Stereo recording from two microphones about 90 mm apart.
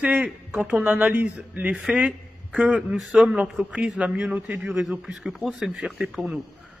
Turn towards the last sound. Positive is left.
turn(degrees=-5)  # may be behind; listen again after turning